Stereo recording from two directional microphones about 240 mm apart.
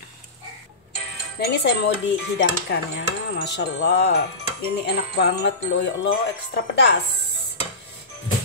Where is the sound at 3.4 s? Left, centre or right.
Left.